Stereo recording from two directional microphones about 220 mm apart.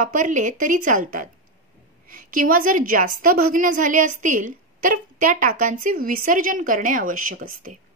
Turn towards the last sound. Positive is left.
turn(degrees=-40)  # may be behind; listen again after turning